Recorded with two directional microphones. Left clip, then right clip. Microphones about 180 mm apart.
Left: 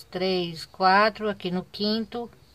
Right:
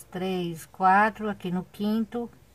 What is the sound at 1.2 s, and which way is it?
Speech, 25° left (ahead or behind).